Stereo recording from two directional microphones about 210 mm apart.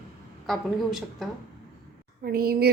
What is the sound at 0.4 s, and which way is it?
Speech, centre (ahead or behind).